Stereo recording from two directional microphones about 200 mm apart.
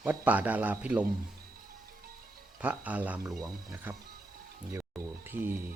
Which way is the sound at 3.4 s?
15° right (ahead or behind).